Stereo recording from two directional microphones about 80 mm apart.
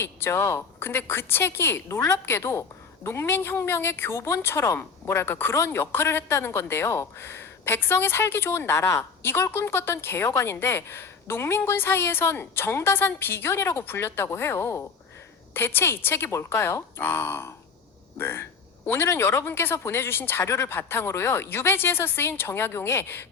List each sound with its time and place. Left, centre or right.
0.0 s speech: left